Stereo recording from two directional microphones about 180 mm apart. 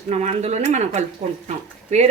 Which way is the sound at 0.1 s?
40° right (ahead or behind).